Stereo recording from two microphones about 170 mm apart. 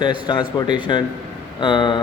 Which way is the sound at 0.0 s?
25° left (ahead or behind).